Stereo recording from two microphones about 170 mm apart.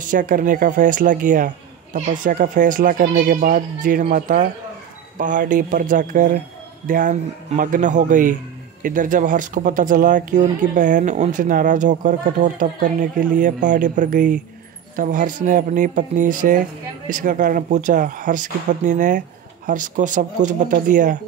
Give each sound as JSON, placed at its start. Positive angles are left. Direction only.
{"t": 0.0, "sound": "speech", "side_deg": -50}